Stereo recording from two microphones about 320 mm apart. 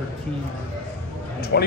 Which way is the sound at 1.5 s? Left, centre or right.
Left.